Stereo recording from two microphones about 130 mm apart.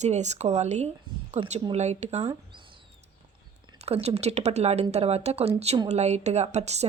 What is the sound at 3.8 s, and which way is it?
A woman's voice, 55° right (ahead or behind).